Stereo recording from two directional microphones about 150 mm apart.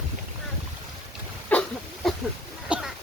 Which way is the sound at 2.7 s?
5° right (ahead or behind).